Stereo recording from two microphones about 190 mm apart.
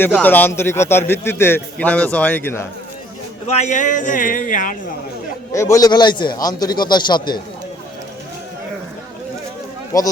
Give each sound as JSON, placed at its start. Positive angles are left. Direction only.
{"t": 0.2, "sound": "a man's voice", "side_deg": 10}
{"t": 3.4, "sound": "a man's voice", "side_deg": 35}
{"t": 5.5, "sound": "speech", "side_deg": 15}
{"t": 9.9, "sound": "a man's voice", "side_deg": 20}